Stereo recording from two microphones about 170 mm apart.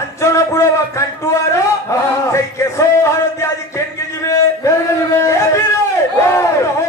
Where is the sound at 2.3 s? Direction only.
15° left (ahead or behind).